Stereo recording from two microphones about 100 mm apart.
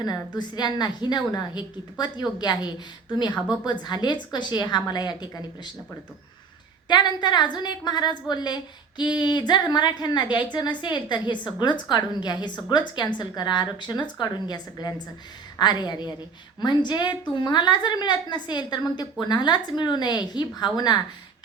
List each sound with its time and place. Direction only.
0.0 s a woman's voice: 45° left (ahead or behind)
6.8 s a woman's voice: 45° left (ahead or behind)